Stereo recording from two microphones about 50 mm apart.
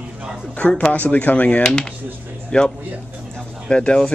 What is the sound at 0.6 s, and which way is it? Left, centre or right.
Speech, left.